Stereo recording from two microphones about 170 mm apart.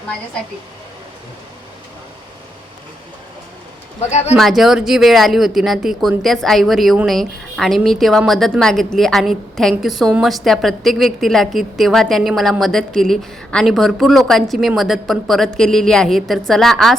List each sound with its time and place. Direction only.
4.1 s speech: 40° left (ahead or behind)
4.4 s speech: centre (ahead or behind)